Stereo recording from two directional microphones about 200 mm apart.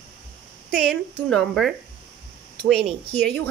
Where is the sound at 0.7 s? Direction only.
5° left (ahead or behind).